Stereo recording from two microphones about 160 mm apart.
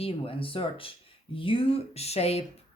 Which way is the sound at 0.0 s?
35° left (ahead or behind).